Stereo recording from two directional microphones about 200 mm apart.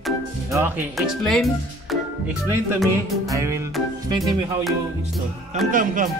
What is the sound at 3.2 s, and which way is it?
Speech, 15° right (ahead or behind).